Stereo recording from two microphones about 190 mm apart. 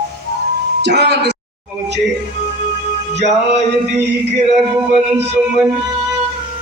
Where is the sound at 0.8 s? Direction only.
65° right (ahead or behind).